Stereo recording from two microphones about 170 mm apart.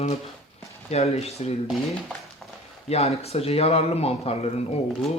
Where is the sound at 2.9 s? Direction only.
40° left (ahead or behind).